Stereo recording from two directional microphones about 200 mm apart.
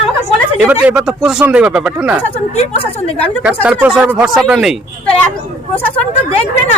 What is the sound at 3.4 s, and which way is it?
Speech, 5° right (ahead or behind).